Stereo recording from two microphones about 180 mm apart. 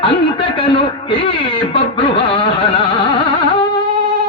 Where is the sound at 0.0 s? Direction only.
30° left (ahead or behind).